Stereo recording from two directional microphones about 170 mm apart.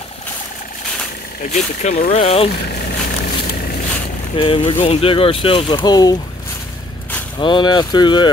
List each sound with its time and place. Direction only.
1.5 s speech: 45° left (ahead or behind)
4.4 s speech: 30° left (ahead or behind)
7.3 s speech: 30° left (ahead or behind)